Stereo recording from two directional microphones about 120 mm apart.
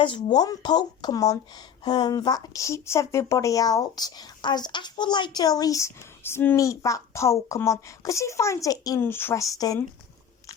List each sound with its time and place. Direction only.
0.0 s a woman's voice: 40° left (ahead or behind)
9.0 s a woman's voice: 20° left (ahead or behind)